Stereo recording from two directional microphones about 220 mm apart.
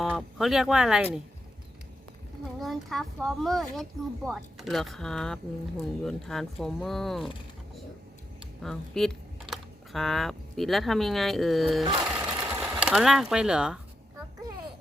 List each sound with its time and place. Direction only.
0.0 s speech: centre (ahead or behind)
2.6 s a child's voice: centre (ahead or behind)
8.6 s speech: centre (ahead or behind)